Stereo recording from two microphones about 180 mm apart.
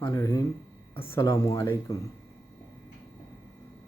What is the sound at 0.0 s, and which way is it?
Speech, 15° left (ahead or behind).